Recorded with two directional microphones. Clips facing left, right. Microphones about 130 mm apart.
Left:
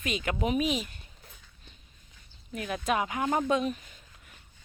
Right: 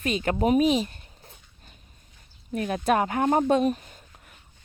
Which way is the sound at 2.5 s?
40° right (ahead or behind).